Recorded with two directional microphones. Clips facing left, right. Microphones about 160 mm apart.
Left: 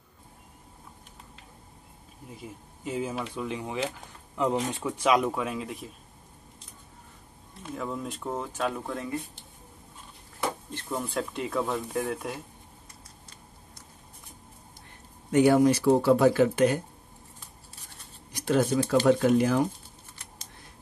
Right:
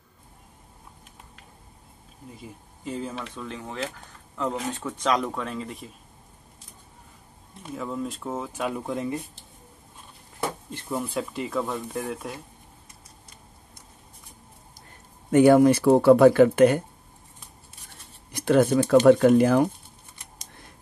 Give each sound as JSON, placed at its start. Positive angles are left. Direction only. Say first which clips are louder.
{"t": 2.3, "sound": "speech", "louder": "left 4 dB", "side_deg": 0}
{"t": 7.7, "sound": "speech", "louder": "right 3 dB", "side_deg": 0}
{"t": 10.7, "sound": "speech", "louder": "right 2 dB", "side_deg": -5}
{"t": 15.3, "sound": "speech", "louder": "right 4 dB", "side_deg": -55}
{"t": 18.3, "sound": "speech", "louder": "right 5 dB", "side_deg": -60}